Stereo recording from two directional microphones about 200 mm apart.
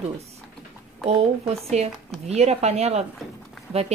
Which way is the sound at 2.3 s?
35° right (ahead or behind).